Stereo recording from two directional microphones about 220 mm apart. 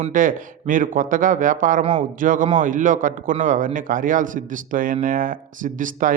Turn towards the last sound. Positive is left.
turn(degrees=-35)  # may be behind; listen again after turning